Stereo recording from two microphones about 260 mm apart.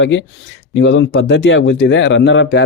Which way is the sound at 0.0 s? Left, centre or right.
Left.